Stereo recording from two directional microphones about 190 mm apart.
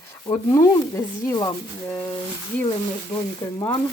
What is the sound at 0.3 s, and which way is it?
Speech, 20° left (ahead or behind).